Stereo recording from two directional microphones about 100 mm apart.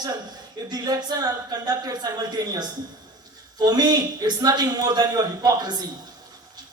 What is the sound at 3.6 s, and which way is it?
A man's voice, 45° right (ahead or behind).